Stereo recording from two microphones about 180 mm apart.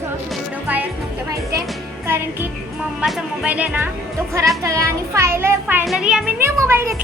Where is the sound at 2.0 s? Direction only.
10° right (ahead or behind).